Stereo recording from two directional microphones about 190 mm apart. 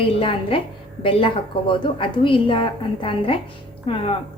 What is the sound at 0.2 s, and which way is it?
A woman's voice, 30° left (ahead or behind).